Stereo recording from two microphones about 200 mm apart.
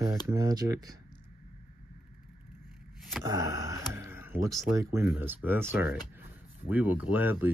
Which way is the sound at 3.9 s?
10° right (ahead or behind).